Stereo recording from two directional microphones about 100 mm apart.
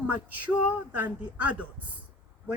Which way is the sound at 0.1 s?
15° right (ahead or behind).